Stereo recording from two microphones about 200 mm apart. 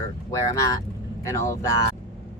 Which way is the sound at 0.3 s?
15° left (ahead or behind).